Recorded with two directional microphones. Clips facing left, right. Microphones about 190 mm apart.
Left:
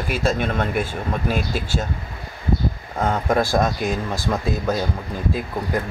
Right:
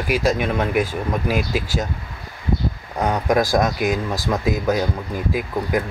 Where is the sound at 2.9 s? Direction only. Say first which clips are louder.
Right 2 dB; 15° right (ahead or behind).